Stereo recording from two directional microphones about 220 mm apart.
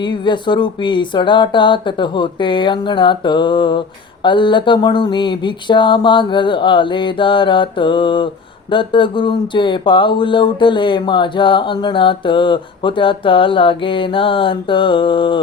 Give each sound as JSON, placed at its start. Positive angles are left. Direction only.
{"t": 0.0, "sound": "speech", "side_deg": 20}